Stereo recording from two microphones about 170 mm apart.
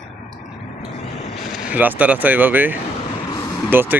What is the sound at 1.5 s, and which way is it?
Speech, 10° right (ahead or behind).